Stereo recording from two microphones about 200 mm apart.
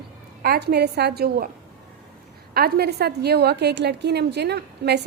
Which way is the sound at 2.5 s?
50° right (ahead or behind).